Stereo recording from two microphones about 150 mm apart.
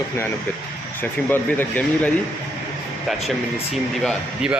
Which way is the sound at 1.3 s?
15° left (ahead or behind).